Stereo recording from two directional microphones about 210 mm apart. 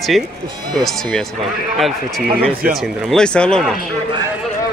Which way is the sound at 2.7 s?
Centre (ahead or behind).